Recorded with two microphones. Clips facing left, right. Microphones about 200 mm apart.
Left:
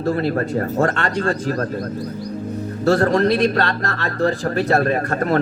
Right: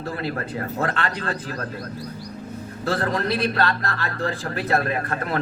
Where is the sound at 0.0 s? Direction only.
45° left (ahead or behind).